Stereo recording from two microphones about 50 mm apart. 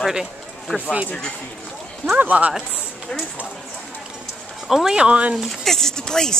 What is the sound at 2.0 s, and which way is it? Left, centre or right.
Speech, right.